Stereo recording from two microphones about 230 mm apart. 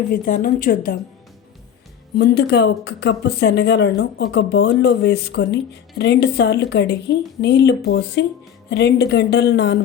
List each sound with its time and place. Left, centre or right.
0.1 s speech: left
2.1 s speech: left